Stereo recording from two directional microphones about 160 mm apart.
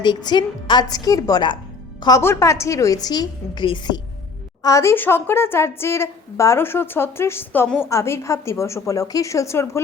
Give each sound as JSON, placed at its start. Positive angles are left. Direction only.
{"t": 0.0, "sound": "a woman's voice", "side_deg": 30}
{"t": 4.6, "sound": "a woman's voice", "side_deg": 20}